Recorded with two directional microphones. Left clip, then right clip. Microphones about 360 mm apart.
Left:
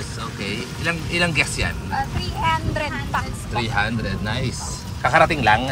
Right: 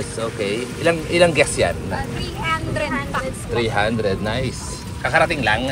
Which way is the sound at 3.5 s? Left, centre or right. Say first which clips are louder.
Right 3 dB; centre.